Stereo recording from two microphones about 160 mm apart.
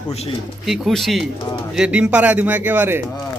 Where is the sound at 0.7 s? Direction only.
Centre (ahead or behind).